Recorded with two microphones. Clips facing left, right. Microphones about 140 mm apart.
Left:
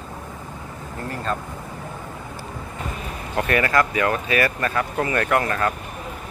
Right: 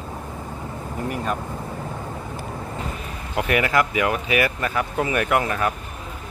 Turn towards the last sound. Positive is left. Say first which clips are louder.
# even
turn(degrees=-15)  # may be behind; listen again after turning